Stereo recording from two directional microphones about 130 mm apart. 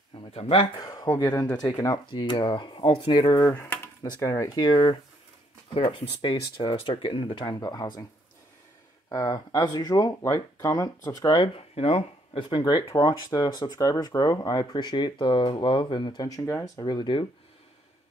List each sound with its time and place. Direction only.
0.3 s speech: 45° left (ahead or behind)
0.7 s speech: 30° left (ahead or behind)
3.5 s a sound: 15° left (ahead or behind)
4.0 s speech: 25° left (ahead or behind)
4.6 s speech: 35° left (ahead or behind)
9.1 s speech: 30° left (ahead or behind)
16.3 s speech: 20° left (ahead or behind)
16.7 s speech: 35° left (ahead or behind)